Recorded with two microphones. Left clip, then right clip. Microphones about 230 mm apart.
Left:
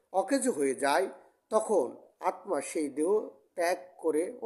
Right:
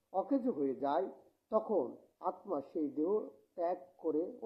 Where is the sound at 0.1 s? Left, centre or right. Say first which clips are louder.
Left 6 dB; left.